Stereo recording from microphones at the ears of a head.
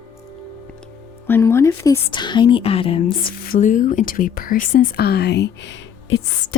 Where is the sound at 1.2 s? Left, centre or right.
Left.